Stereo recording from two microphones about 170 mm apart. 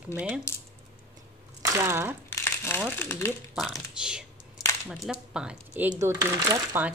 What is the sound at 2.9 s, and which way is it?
Speech, 15° left (ahead or behind).